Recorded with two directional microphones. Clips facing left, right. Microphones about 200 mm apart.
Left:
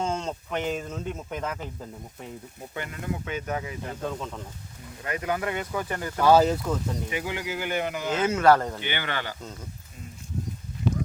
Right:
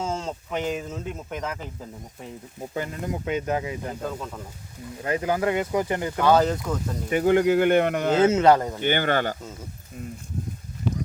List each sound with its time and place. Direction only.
0.0 s speech: 5° right (ahead or behind)
2.7 s speech: 30° right (ahead or behind)
4.0 s speech: 5° right (ahead or behind)
5.0 s speech: 30° right (ahead or behind)
6.1 s speech: 5° left (ahead or behind)
7.1 s speech: 50° right (ahead or behind)
8.1 s speech: 25° right (ahead or behind)
8.8 s speech: 45° right (ahead or behind)